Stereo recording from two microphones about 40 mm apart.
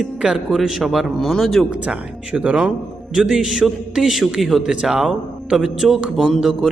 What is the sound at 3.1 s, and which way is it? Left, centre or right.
Speech, centre.